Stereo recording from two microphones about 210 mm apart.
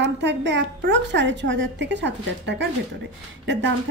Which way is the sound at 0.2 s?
55° right (ahead or behind).